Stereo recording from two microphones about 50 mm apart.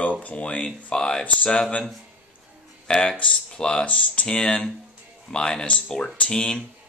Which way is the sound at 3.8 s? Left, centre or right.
Left.